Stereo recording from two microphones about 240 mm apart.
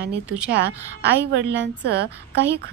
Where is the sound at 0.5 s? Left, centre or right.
Right.